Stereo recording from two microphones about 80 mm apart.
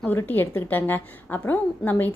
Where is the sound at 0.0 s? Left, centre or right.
Left.